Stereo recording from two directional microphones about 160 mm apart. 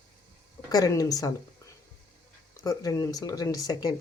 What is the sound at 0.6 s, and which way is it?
Speech, 25° left (ahead or behind).